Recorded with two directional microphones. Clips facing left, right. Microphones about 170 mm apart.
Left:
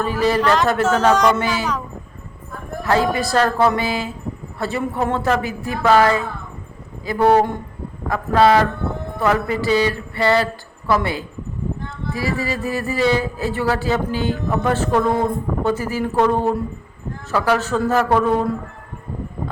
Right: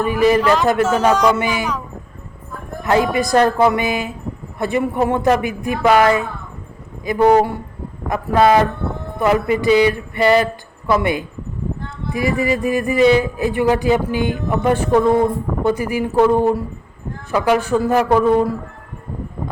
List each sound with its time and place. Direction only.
0.0 s a man's voice: 15° right (ahead or behind)
2.8 s a man's voice: 15° right (ahead or behind)